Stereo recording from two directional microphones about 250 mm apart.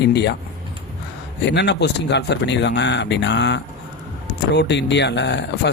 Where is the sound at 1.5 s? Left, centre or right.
Left.